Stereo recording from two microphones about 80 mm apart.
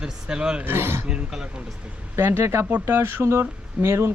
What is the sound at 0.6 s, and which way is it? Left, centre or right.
Speech, right.